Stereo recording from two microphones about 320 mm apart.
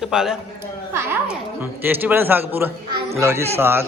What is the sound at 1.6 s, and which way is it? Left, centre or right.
Speech, centre.